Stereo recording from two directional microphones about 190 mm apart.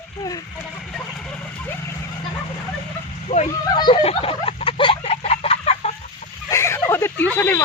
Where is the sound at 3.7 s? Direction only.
25° left (ahead or behind).